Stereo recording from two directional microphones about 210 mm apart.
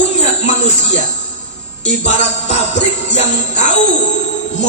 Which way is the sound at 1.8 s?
35° left (ahead or behind).